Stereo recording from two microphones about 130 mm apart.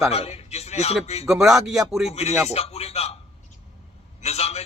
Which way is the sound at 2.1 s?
55° left (ahead or behind).